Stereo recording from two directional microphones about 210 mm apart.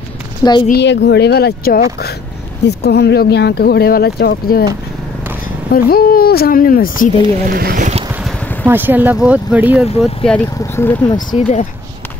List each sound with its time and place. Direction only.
0.4 s a woman's voice: 20° left (ahead or behind)
0.7 s speech: 55° left (ahead or behind)
5.7 s speech: 45° left (ahead or behind)
7.4 s speech: 40° right (ahead or behind)
8.2 s speech: 10° right (ahead or behind)
9.8 s speech: 30° left (ahead or behind)
10.6 s speech: 15° left (ahead or behind)
11.1 s speech: 35° left (ahead or behind)